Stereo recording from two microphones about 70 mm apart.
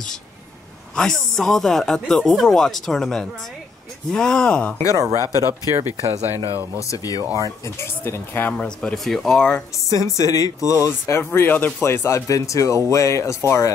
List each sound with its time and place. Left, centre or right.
0.9 s speech: centre
4.9 s speech: right
6.3 s speech: left
7.8 s speech: left
8.5 s speech: centre
9.8 s speech: left
11.1 s speech: left
11.4 s speech: left
11.8 s speech: left